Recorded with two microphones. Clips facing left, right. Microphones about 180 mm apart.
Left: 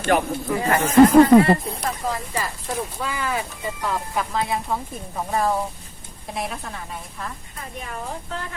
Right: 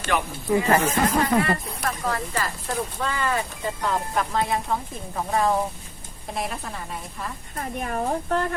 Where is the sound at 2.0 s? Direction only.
15° left (ahead or behind).